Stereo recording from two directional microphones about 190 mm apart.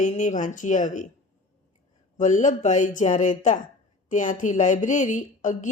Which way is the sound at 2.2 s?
40° left (ahead or behind).